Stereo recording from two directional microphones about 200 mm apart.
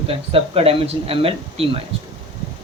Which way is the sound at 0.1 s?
30° right (ahead or behind).